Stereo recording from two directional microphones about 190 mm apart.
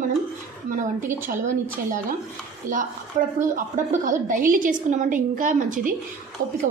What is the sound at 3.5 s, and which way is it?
A woman's voice, 40° right (ahead or behind).